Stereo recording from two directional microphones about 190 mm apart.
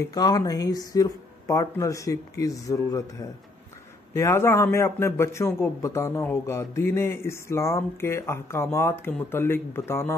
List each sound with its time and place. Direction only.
0.0 s a man's voice: 20° left (ahead or behind)